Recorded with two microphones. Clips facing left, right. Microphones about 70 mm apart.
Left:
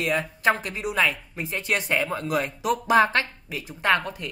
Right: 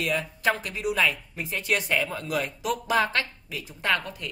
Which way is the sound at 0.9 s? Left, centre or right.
Centre.